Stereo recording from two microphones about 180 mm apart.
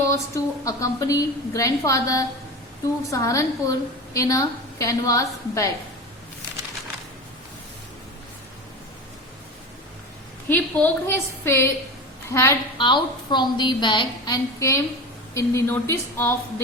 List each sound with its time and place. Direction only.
0.0 s a woman's voice: 15° left (ahead or behind)
10.5 s a woman's voice: 10° left (ahead or behind)
12.7 s a woman's voice: 25° left (ahead or behind)